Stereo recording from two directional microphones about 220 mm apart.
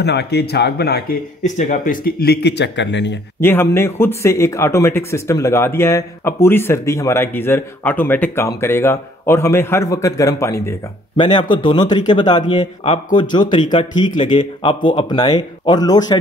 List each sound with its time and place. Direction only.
0.0 s speech: 50° left (ahead or behind)
1.4 s speech: 35° left (ahead or behind); by 3.2 s 55° left (ahead or behind)
3.3 s a man's voice: 10° left (ahead or behind)